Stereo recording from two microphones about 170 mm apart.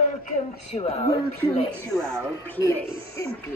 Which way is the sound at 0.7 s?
35° left (ahead or behind).